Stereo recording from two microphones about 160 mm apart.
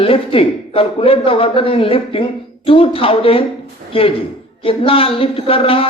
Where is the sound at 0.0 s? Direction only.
35° left (ahead or behind).